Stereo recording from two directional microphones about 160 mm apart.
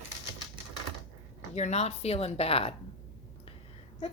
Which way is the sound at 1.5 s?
45° left (ahead or behind).